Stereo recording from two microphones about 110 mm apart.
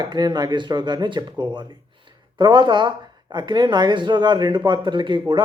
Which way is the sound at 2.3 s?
45° right (ahead or behind).